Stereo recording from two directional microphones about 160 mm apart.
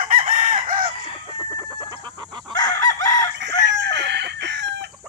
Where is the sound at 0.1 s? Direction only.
55° right (ahead or behind).